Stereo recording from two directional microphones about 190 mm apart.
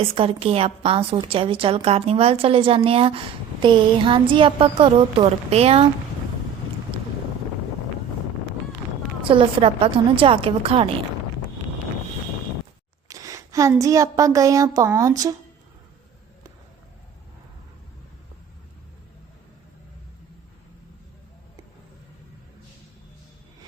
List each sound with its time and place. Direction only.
0.0 s a woman's voice: 30° right (ahead or behind)
9.2 s a woman's voice: 25° right (ahead or behind)
13.1 s a woman's voice: 20° right (ahead or behind)